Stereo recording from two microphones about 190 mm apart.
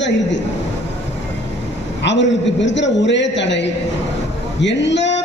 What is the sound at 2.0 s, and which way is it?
A man's voice, 70° left (ahead or behind).